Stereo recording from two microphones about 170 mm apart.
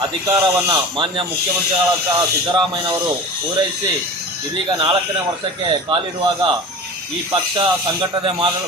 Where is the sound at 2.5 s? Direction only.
25° right (ahead or behind).